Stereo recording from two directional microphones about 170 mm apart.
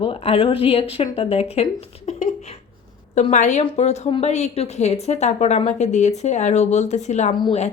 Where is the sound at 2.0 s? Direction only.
40° left (ahead or behind).